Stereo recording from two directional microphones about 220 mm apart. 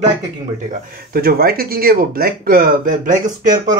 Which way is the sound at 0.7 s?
40° right (ahead or behind).